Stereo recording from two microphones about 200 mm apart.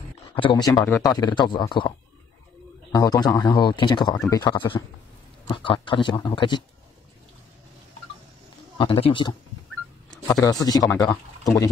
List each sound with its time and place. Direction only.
0.4 s speech: 20° left (ahead or behind)
8.7 s speech: 25° left (ahead or behind)
10.4 s speech: 20° left (ahead or behind)